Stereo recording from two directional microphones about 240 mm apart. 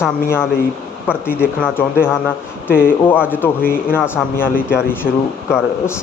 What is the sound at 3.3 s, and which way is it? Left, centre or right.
Speech, centre.